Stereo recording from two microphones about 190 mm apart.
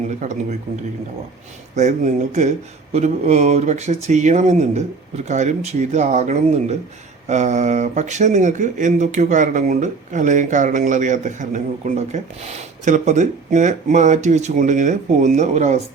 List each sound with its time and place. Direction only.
1.7 s speech: 40° right (ahead or behind)